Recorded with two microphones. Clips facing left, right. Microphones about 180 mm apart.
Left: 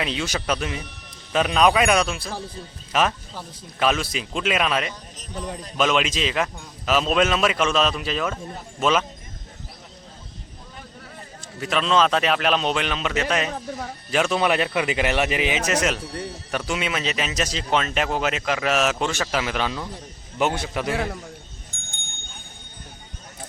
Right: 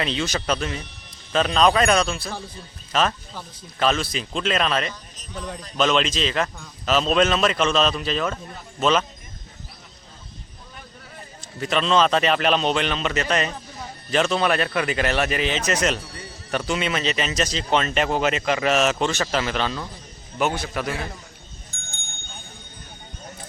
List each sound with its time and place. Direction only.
0.0 s speech: 5° left (ahead or behind)
11.6 s a man's voice: 5° left (ahead or behind); by 20.9 s 20° left (ahead or behind)